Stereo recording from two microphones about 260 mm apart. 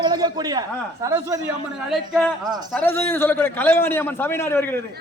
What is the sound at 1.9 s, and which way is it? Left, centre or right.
A man's voice, centre.